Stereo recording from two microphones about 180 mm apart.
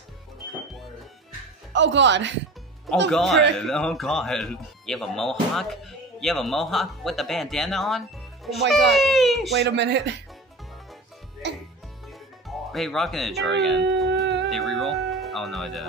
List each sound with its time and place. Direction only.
1.7 s speech: 85° right
3.1 s a man's voice: centre (ahead or behind)
9.5 s speech: 70° right (ahead or behind)
12.1 s speech: centre (ahead or behind)
14.2 s music: 70° right (ahead or behind)
14.5 s speech: centre (ahead or behind)